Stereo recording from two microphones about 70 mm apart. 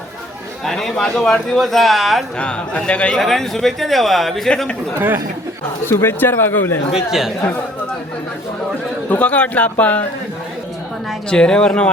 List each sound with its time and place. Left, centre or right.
0.6 s speech: centre
2.4 s a man's voice: centre
3.2 s speech: centre
5.8 s speech: left
6.9 s speech: centre
9.0 s speech: centre
11.3 s a man's voice: centre